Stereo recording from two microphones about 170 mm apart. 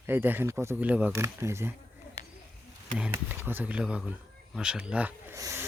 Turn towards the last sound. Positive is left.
turn(degrees=-20)  # may be behind; listen again after turning